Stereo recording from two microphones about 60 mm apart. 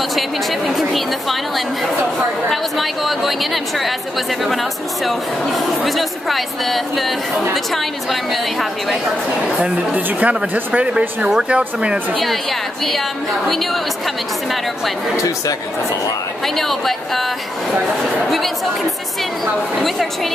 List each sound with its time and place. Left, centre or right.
0.7 s a woman's voice: centre
2.5 s a woman's voice: centre
5.9 s a woman's voice: centre
9.9 s speech: right
16.4 s a woman's voice: centre
19.4 s a woman's voice: centre